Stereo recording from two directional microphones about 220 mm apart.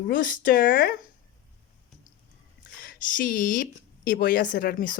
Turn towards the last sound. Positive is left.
turn(degrees=40)  # may be behind; listen again after turning